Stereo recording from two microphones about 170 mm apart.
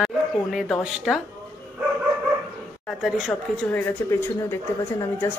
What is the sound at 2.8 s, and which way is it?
Speech, centre (ahead or behind).